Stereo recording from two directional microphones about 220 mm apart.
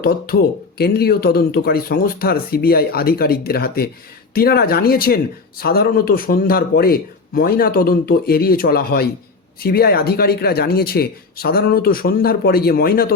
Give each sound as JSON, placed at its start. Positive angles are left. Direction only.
{"t": 0.0, "sound": "speech", "side_deg": 45}